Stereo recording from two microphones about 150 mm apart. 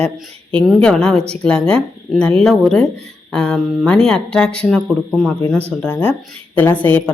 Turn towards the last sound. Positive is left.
turn(degrees=10)  # may be behind; listen again after turning